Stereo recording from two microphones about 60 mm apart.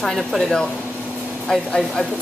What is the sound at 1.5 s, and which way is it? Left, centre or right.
Speech, centre.